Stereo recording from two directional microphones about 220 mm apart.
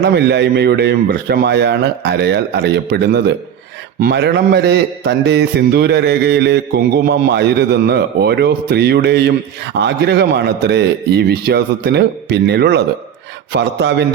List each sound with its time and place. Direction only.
0.0 s a man's voice: 50° right (ahead or behind)